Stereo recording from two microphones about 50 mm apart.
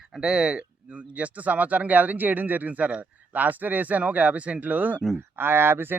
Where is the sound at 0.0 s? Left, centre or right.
Centre.